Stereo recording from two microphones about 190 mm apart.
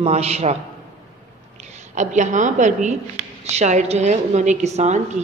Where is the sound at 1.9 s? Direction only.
40° right (ahead or behind).